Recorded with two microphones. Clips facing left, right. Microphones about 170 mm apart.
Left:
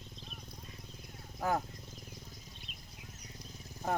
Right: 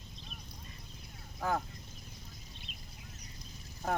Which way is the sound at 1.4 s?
10° left (ahead or behind).